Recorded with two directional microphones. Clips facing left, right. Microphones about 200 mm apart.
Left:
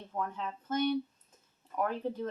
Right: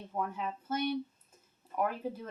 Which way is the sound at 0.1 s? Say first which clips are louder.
Right 1 dB; 10° right (ahead or behind).